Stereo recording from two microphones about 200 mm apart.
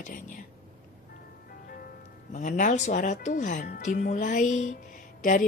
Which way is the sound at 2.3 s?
40° left (ahead or behind).